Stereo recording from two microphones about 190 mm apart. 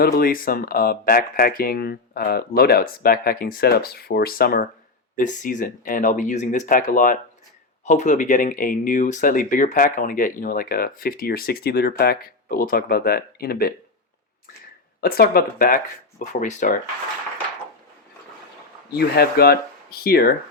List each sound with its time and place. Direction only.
0.0 s speech: 50° left (ahead or behind)
15.0 s speech: 55° left (ahead or behind)
18.9 s speech: 55° left (ahead or behind)